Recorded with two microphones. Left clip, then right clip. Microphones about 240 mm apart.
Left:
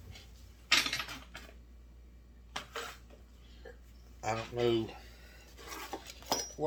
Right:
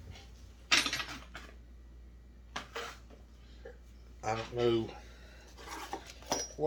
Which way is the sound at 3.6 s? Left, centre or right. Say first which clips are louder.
Right 1 dB; left.